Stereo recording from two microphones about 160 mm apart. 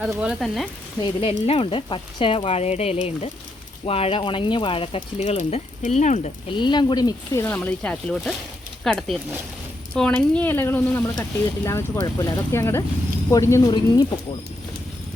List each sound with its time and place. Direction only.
0.2 s speech: 5° right (ahead or behind)
1.0 s speech: 35° left (ahead or behind)
6.6 s speech: 30° left (ahead or behind)
7.4 s speech: 10° left (ahead or behind); by 14.3 s 30° left (ahead or behind)